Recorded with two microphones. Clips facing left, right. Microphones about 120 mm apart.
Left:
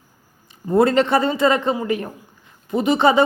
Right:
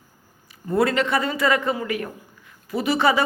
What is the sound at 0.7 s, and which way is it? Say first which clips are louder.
A man's voice: left 5 dB; 25° left (ahead or behind).